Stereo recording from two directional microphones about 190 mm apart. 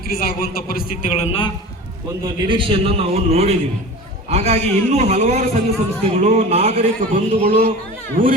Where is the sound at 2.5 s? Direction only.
25° right (ahead or behind).